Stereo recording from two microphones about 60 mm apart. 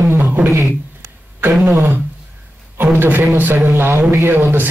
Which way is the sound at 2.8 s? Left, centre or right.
Right.